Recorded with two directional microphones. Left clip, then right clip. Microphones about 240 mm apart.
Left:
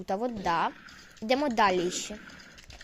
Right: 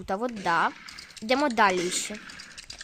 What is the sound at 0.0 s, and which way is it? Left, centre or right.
Speech, right.